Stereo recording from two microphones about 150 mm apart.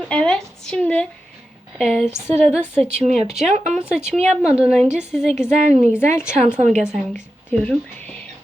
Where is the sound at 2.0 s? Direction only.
15° left (ahead or behind).